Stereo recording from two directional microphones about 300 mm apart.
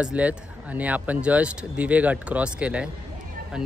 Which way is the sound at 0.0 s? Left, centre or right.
Centre.